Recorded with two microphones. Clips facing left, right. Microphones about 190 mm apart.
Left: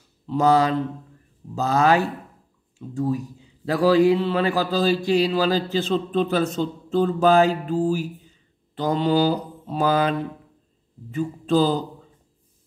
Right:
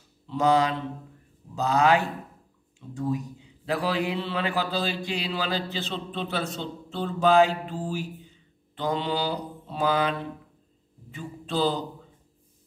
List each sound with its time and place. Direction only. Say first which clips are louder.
0.3 s mantra: left 4 dB; 40° left (ahead or behind)
3.6 s mantra: left 10 dB; 40° left (ahead or behind)